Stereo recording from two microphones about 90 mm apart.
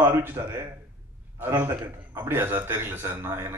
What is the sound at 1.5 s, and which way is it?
A man's voice, 30° right (ahead or behind).